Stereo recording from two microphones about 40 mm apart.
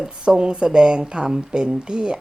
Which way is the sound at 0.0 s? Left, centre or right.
Right.